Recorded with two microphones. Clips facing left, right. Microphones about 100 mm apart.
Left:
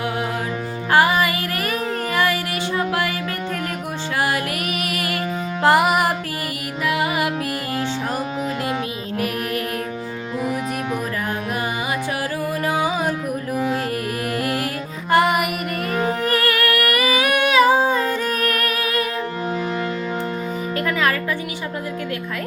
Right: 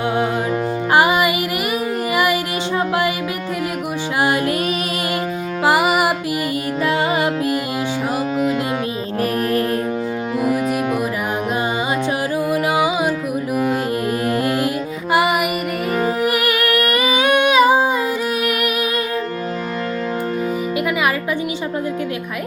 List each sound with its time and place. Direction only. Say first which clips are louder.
0.9 s music: right 1 dB; 15° right (ahead or behind)
4.2 s music: right 4 dB; 20° right (ahead or behind)
5.6 s music: even; 5° right (ahead or behind)
6.8 s music: right 2 dB; 30° right (ahead or behind)
9.1 s music: right 5 dB; 35° right (ahead or behind)
12.5 s music: right 3 dB; 15° right (ahead or behind)
14.3 s music: right 4 dB; 25° right (ahead or behind)
15.1 s music: even; 5° right (ahead or behind)
16.0 s humming: right 2 dB; 10° right (ahead or behind)
20.7 s music: even; 10° right (ahead or behind)